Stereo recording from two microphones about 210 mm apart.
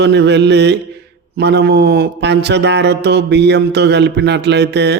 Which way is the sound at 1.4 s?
55° right (ahead or behind).